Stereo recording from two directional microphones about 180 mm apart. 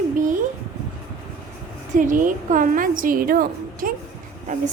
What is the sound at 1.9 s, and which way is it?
A woman's voice, 45° right (ahead or behind).